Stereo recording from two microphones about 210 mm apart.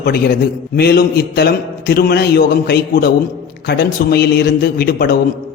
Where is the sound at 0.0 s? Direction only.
45° left (ahead or behind).